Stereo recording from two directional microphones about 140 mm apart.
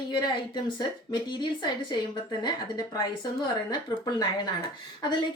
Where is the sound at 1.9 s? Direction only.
30° left (ahead or behind).